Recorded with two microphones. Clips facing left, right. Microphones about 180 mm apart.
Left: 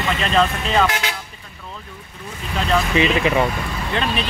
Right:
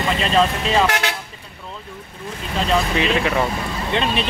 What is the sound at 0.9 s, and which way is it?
Speech, 70° right (ahead or behind).